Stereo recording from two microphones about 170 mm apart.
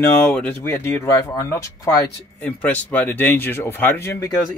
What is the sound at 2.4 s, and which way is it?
Speech, 10° left (ahead or behind).